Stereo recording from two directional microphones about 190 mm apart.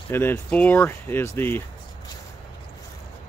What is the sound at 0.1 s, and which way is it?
Speech, 10° left (ahead or behind).